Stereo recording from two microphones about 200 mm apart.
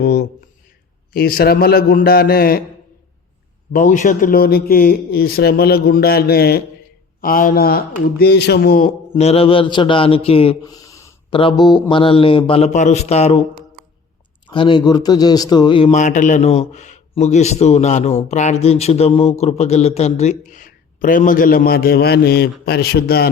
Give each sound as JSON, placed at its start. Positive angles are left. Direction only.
{"t": 0.0, "sound": "speech", "side_deg": 50}
{"t": 3.7, "sound": "speech", "side_deg": 40}
{"t": 9.1, "sound": "speech", "side_deg": 30}
{"t": 10.6, "sound": "a sound", "side_deg": 15}
{"t": 11.3, "sound": "speech", "side_deg": 25}
{"t": 15.9, "sound": "a man's voice", "side_deg": 35}